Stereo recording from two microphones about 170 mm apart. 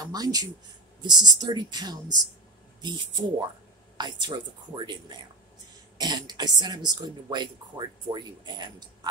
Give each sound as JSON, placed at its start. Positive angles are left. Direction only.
{"t": 0.0, "sound": "speech", "side_deg": -20}